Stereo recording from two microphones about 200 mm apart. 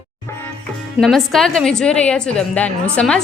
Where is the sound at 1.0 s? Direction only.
Centre (ahead or behind).